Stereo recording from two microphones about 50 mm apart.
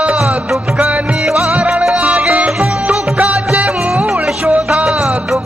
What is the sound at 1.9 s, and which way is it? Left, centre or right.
Music, right.